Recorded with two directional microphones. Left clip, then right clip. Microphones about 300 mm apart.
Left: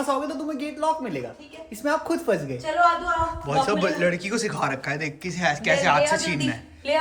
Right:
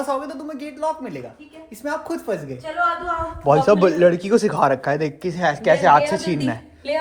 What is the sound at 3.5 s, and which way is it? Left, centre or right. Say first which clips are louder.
A man's voice: right 10 dB; centre.